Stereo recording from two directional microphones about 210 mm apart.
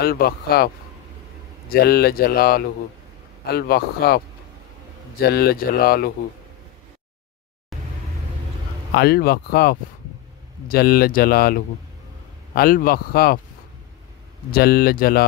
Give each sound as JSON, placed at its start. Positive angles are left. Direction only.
{"t": 0.0, "sound": "speech", "side_deg": 45}
{"t": 1.7, "sound": "speech", "side_deg": 50}
{"t": 5.2, "sound": "speech", "side_deg": 45}
{"t": 8.9, "sound": "speech", "side_deg": 50}
{"t": 14.5, "sound": "speech", "side_deg": 45}